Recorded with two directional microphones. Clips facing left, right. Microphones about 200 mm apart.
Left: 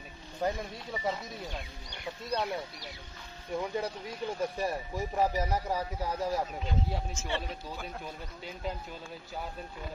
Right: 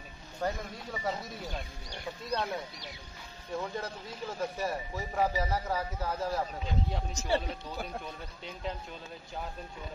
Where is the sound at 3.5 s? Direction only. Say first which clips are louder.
Left 3 dB; 15° left (ahead or behind).